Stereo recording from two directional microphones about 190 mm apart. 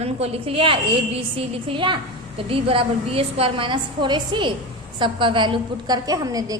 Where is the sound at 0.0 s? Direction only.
30° right (ahead or behind).